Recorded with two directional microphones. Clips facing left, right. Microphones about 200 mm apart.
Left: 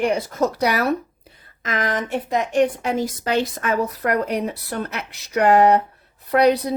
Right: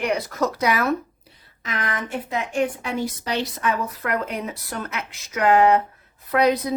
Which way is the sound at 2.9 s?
45° left (ahead or behind).